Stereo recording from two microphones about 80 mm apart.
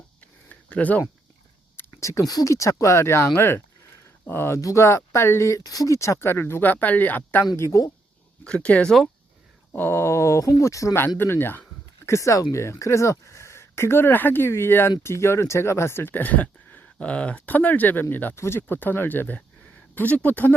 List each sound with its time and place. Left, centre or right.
0.2 s a sound: centre
2.0 s speech: left
7.5 s speech: left
8.4 s speech: centre
9.7 s speech: left
11.2 s speech: left
12.0 s speech: left